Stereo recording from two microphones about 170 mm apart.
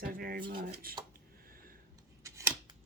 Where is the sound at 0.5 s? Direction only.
55° right (ahead or behind).